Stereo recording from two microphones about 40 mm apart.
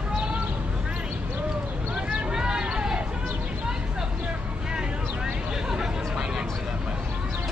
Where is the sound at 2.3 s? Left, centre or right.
Centre.